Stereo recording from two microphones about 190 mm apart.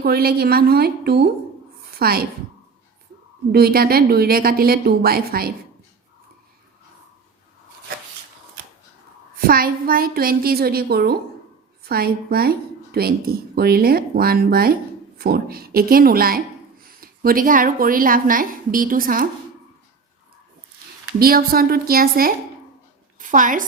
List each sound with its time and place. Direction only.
0.0 s a woman's voice: 55° right (ahead or behind)
3.5 s speech: 55° right (ahead or behind)
9.5 s speech: 50° right (ahead or behind)
21.2 s a woman's voice: 50° right (ahead or behind)